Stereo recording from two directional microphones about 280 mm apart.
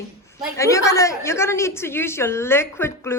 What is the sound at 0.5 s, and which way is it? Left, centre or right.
A woman's voice, centre.